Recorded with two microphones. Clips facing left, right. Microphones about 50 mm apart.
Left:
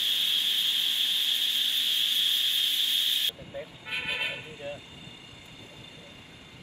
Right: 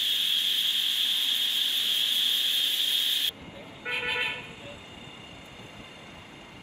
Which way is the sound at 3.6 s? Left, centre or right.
Right.